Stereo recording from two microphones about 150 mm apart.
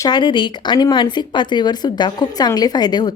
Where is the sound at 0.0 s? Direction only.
30° left (ahead or behind).